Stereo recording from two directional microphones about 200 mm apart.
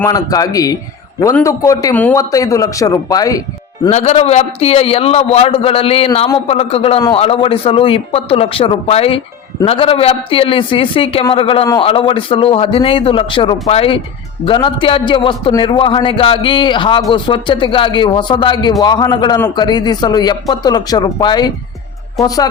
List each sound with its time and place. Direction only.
0.0 s a man's voice: 15° left (ahead or behind)
3.8 s a man's voice: 35° left (ahead or behind)
22.2 s a woman's voice: centre (ahead or behind)